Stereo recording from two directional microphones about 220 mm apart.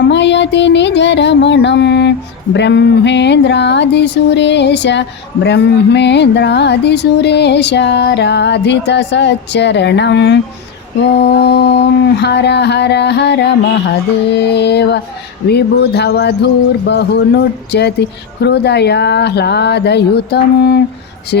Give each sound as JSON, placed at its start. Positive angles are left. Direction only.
{"t": 0.1, "sound": "music", "side_deg": 55}